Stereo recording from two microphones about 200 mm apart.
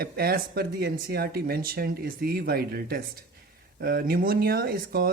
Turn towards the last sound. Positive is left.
turn(degrees=-45)  # may be behind; listen again after turning